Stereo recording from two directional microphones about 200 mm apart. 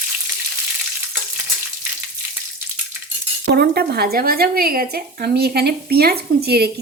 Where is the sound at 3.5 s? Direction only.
50° right (ahead or behind).